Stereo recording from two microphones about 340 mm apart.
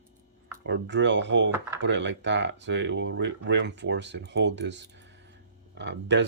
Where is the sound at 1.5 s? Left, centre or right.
Centre.